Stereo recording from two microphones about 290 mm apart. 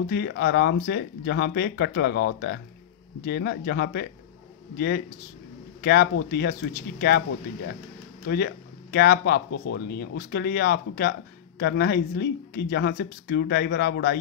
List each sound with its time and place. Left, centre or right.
0.0 s speech: left
8.9 s speech: left